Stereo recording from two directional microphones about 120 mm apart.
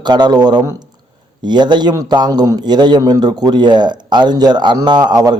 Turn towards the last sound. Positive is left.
turn(degrees=-35)  # may be behind; listen again after turning